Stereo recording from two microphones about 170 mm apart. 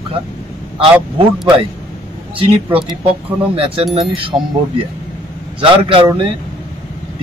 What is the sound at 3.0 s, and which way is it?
Speech, 35° right (ahead or behind).